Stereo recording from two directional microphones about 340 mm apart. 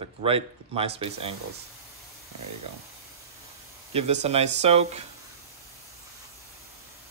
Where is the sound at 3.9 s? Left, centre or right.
Centre.